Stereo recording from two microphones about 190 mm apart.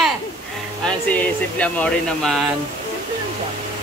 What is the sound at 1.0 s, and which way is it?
Speech, 10° left (ahead or behind).